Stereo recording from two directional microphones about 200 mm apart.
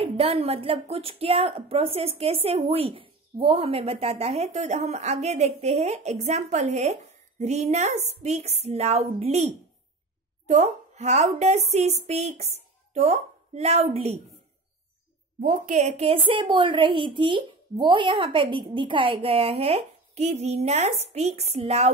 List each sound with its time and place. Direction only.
0.0 s a woman's voice: 30° right (ahead or behind)
15.4 s speech: 40° right (ahead or behind)